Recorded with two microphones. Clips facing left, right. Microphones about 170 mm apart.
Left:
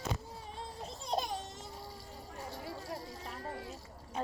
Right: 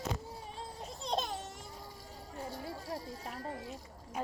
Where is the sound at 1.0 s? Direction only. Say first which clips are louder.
Even; 10° left (ahead or behind).